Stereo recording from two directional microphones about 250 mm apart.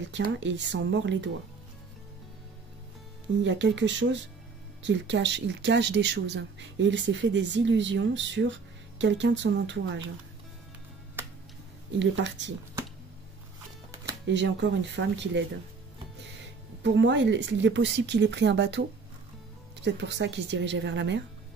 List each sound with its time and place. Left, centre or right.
0.1 s speech: right
3.4 s speech: right
12.0 s speech: right
14.2 s speech: right
16.8 s speech: right